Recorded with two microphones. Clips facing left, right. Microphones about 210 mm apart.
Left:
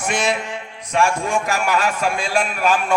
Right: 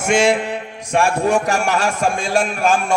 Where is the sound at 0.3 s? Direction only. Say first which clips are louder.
Right 5 dB; 55° right (ahead or behind).